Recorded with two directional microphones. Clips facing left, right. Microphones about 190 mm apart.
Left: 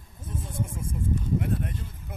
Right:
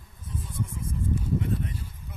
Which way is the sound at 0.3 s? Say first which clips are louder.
Left 1 dB; 50° left (ahead or behind).